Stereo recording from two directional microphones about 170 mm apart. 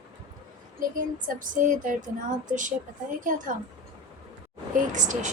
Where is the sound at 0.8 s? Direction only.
50° right (ahead or behind).